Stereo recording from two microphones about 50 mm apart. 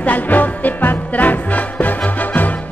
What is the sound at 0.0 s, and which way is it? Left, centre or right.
Music, left.